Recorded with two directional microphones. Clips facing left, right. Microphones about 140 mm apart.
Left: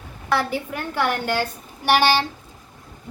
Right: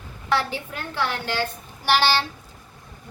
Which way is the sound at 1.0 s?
50° left (ahead or behind).